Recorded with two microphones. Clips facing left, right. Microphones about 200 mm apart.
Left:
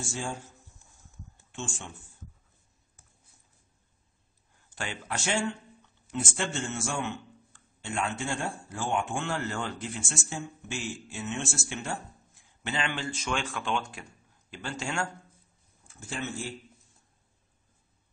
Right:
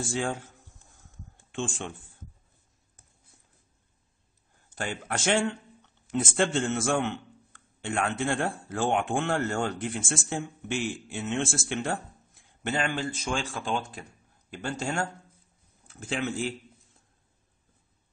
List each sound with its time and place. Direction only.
0.0 s speech: 60° right (ahead or behind)
1.3 s a sound: 55° right (ahead or behind)
4.6 s speech: 45° right (ahead or behind)
5.2 s speech: 60° right (ahead or behind)
9.3 s speech: 45° right (ahead or behind)
15.9 s speech: 90° right